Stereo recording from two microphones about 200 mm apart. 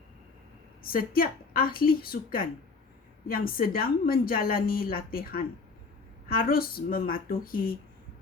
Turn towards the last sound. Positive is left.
turn(degrees=45)  # may be behind; listen again after turning